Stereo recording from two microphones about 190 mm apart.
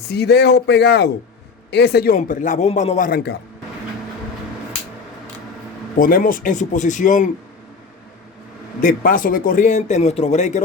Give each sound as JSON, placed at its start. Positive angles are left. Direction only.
{"t": 0.1, "sound": "a man's voice", "side_deg": 60}
{"t": 3.1, "sound": "a man's voice", "side_deg": 50}
{"t": 6.0, "sound": "a man's voice", "side_deg": 45}
{"t": 8.8, "sound": "a man's voice", "side_deg": 45}